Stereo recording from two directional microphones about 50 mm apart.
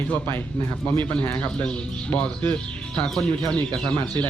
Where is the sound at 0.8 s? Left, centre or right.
Left.